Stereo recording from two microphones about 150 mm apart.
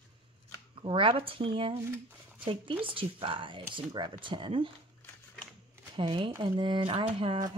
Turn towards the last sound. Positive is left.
turn(degrees=-35)  # may be behind; listen again after turning